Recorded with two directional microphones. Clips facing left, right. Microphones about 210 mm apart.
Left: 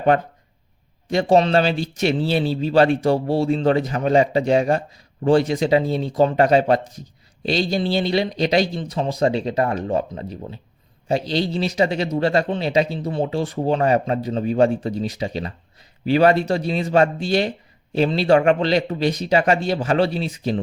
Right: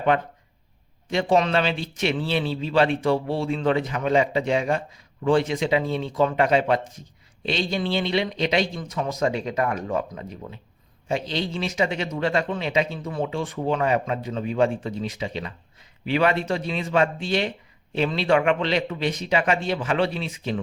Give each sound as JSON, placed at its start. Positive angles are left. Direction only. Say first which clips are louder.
{"t": 0.1, "sound": "a man's voice", "louder": "left 4 dB", "side_deg": 45}